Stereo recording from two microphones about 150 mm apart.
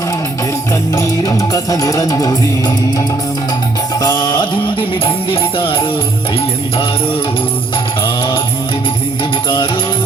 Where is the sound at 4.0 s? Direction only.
25° left (ahead or behind).